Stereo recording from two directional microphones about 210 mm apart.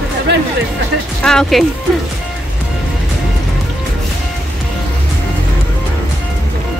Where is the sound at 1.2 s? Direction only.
5° left (ahead or behind).